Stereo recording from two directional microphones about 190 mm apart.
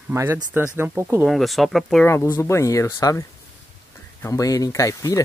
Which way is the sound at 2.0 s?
15° left (ahead or behind).